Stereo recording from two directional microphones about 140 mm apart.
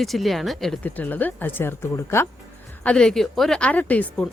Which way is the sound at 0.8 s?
10° left (ahead or behind).